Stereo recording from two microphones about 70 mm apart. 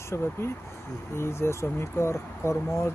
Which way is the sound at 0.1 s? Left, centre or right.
Left.